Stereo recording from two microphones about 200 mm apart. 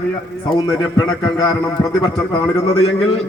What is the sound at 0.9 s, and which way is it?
A man's voice, 20° left (ahead or behind).